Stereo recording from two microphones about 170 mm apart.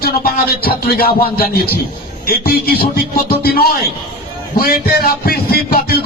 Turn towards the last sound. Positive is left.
turn(degrees=65)  # may be behind; listen again after turning